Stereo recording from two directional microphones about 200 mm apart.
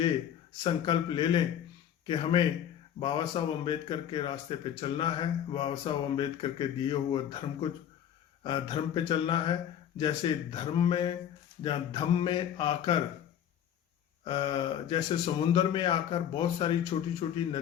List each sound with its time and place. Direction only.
0.6 s speech: 25° left (ahead or behind)
14.3 s speech: 25° left (ahead or behind)